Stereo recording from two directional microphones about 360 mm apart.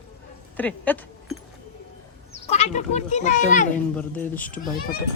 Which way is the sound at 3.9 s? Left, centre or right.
Centre.